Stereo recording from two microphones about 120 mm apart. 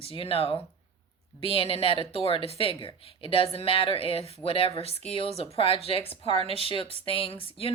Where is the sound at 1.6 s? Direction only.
50° left (ahead or behind).